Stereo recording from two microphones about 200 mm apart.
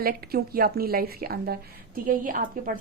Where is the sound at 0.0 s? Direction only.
50° right (ahead or behind).